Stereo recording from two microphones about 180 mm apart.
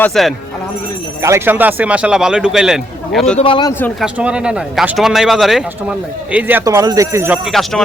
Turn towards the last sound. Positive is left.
turn(degrees=0)  # may be behind; listen again after turning